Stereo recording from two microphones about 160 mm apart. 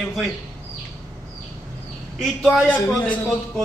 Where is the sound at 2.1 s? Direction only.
Centre (ahead or behind).